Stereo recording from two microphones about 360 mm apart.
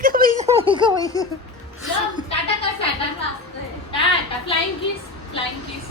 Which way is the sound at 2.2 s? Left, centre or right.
Centre.